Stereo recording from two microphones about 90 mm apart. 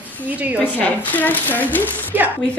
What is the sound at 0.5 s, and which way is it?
Speech, 20° left (ahead or behind).